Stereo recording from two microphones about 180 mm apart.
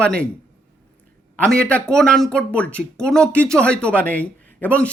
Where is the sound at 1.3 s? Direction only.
5° left (ahead or behind).